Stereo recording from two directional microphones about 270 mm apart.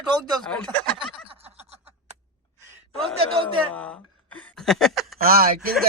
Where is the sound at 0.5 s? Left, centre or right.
Centre.